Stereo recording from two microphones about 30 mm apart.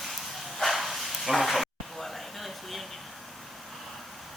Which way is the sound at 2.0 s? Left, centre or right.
Centre.